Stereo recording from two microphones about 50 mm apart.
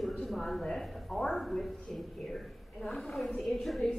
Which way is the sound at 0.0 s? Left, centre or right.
Centre.